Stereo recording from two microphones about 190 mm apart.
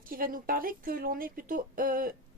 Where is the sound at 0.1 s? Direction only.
50° right (ahead or behind).